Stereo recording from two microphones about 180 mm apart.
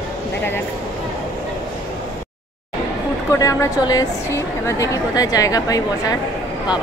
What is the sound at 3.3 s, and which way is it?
A woman's voice, 15° left (ahead or behind).